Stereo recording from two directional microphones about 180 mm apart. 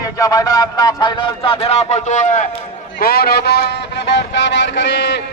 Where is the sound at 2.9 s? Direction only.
55° left (ahead or behind); by 5.2 s 75° left (ahead or behind).